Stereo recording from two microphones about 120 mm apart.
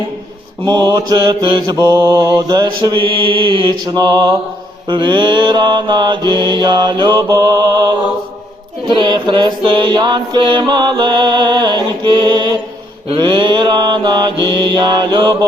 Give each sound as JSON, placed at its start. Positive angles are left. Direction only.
{"t": 0.7, "sound": "mantra", "side_deg": -35}
{"t": 1.6, "sound": "mantra", "side_deg": -30}
{"t": 3.8, "sound": "mantra", "side_deg": -35}